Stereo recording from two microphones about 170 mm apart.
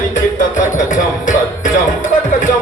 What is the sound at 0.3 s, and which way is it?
Music, 50° left (ahead or behind).